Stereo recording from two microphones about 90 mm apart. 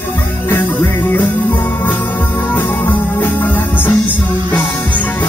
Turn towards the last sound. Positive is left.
turn(degrees=20)  # may be behind; listen again after turning